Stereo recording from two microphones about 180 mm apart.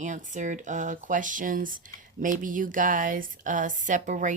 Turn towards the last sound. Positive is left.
turn(degrees=-45)  # may be behind; listen again after turning